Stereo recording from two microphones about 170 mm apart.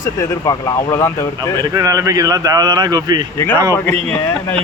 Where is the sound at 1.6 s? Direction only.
20° right (ahead or behind).